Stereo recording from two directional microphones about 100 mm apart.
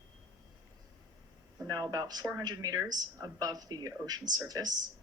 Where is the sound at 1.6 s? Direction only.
40° right (ahead or behind).